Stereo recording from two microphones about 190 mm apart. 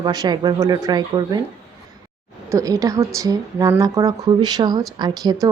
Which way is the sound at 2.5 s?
15° right (ahead or behind).